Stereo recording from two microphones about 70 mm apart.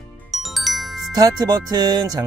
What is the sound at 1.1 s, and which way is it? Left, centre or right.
Speech, right.